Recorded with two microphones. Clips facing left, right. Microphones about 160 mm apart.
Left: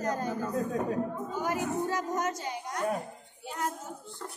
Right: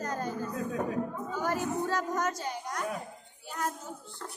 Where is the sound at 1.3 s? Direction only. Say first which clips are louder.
Right 2 dB; 20° left (ahead or behind).